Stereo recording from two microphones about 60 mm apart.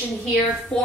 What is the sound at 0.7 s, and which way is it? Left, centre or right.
Speech, centre.